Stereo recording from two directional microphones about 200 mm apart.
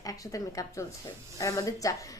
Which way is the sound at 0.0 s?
15° left (ahead or behind).